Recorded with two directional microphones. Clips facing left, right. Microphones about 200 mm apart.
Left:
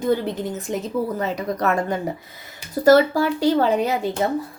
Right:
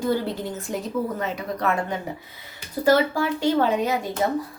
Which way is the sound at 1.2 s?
40° left (ahead or behind).